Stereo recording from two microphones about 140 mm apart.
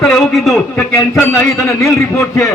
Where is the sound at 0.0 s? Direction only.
Centre (ahead or behind).